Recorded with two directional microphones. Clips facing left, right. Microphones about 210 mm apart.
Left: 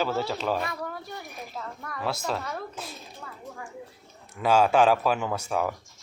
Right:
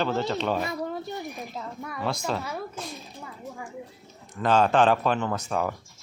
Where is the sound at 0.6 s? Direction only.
25° right (ahead or behind).